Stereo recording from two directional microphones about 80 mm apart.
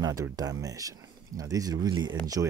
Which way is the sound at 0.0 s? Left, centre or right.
Right.